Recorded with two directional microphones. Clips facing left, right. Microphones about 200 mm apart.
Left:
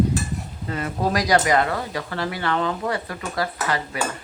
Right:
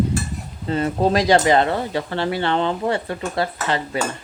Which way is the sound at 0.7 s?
25° right (ahead or behind).